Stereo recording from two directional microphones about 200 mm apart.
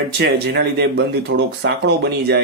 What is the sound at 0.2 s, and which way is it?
Speech, 55° right (ahead or behind).